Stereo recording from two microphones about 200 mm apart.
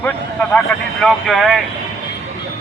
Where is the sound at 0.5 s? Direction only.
Centre (ahead or behind).